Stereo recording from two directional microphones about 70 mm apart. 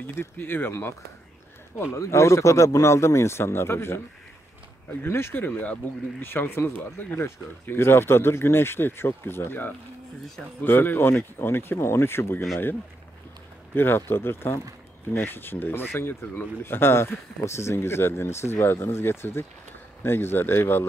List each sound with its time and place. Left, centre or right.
0.0 s speech: left
1.9 s speech: left
5.0 s speech: left
13.7 s speech: left